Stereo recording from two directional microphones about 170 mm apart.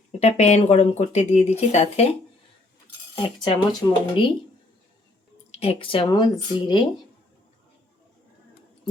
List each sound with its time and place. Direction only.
0.2 s speech: 40° left (ahead or behind)
3.3 s speech: 25° left (ahead or behind)
5.5 s speech: 35° left (ahead or behind)